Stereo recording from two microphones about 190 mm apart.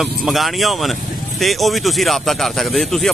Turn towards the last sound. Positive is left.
turn(degrees=0)  # may be behind; listen again after turning